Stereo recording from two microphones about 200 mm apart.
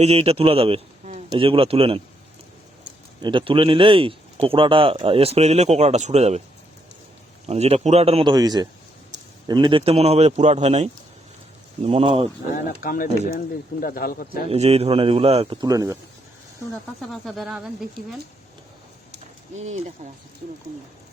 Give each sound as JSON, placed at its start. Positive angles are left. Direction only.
{"t": 0.0, "sound": "a man's voice", "side_deg": -30}
{"t": 3.2, "sound": "a man's voice", "side_deg": -25}
{"t": 7.4, "sound": "a man's voice", "side_deg": -30}
{"t": 12.8, "sound": "speech", "side_deg": 45}
{"t": 14.5, "sound": "a man's voice", "side_deg": -30}
{"t": 15.6, "sound": "speech", "side_deg": -15}
{"t": 17.0, "sound": "speech", "side_deg": 0}
{"t": 19.5, "sound": "a man's voice", "side_deg": -35}